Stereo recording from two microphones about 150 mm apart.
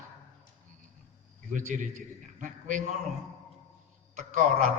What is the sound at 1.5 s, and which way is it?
A man's voice, 60° right (ahead or behind).